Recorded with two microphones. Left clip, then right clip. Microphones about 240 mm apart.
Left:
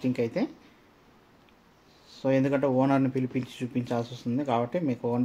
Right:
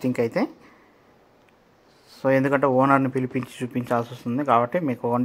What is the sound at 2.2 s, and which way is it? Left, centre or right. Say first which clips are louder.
Speech: right 5 dB; centre.